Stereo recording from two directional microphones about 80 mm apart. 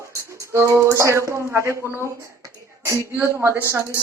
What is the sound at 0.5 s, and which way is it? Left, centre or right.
Speech, right.